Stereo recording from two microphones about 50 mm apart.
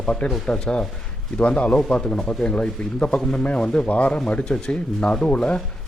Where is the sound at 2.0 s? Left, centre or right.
Centre.